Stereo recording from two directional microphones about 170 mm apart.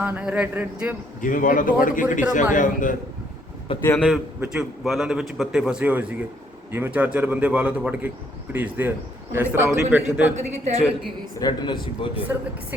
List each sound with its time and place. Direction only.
0.0 s a man's voice: 10° right (ahead or behind)
1.2 s a man's voice: 50° left (ahead or behind)
3.8 s a man's voice: 5° left (ahead or behind); by 10.3 s 10° right (ahead or behind)
11.3 s a man's voice: 25° left (ahead or behind)